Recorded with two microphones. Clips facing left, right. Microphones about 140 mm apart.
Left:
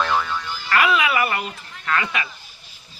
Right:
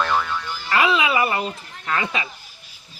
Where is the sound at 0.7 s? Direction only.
25° right (ahead or behind).